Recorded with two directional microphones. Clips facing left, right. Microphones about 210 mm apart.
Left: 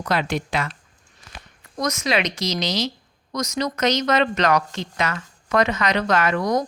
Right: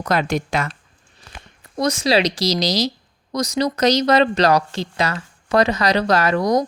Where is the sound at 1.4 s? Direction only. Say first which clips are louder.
Right 4 dB; 30° right (ahead or behind).